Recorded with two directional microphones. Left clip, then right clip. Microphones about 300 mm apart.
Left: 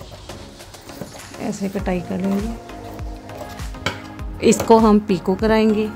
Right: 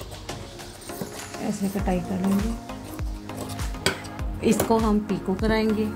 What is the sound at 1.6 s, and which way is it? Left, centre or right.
Speech, left.